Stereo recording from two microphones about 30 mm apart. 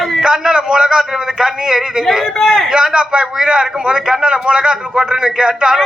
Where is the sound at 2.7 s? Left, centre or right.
Right.